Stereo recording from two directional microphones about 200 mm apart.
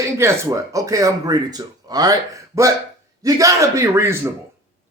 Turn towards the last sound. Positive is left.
turn(degrees=-10)  # may be behind; listen again after turning